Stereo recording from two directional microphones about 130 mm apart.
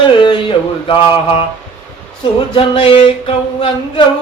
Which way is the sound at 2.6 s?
45° left (ahead or behind).